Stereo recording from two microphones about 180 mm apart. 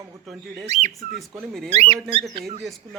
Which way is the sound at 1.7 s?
35° right (ahead or behind).